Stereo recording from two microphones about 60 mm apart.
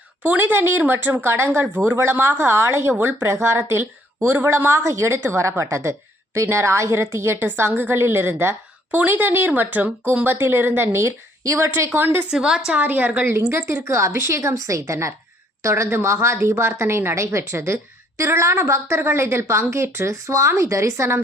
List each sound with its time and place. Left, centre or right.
0.2 s speech: right
1.1 s speech: right
1.6 s speech: right
2.0 s speech: right
4.8 s a woman's voice: right
8.9 s speech: right
10.9 s speech: right
11.9 s speech: right
12.3 s a woman's voice: centre
12.9 s speech: right
13.5 s speech: right